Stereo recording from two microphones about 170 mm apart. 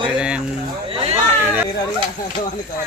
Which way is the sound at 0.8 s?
35° right (ahead or behind).